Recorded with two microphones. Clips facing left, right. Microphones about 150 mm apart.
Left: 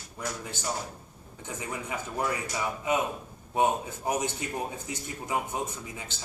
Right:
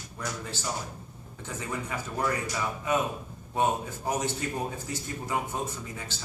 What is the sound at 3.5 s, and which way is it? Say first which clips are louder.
A man's voice: left 1 dB; 15° left (ahead or behind).